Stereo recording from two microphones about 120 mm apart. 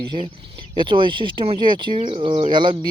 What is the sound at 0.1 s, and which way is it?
Speech, 40° right (ahead or behind).